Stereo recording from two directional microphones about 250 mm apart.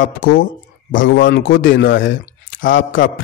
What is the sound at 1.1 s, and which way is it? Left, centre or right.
A man's voice, left.